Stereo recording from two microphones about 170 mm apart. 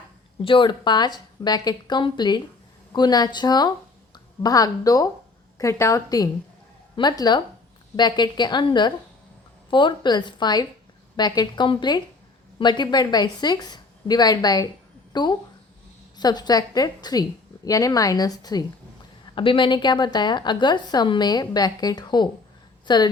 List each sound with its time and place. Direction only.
0.4 s a woman's voice: 30° left (ahead or behind)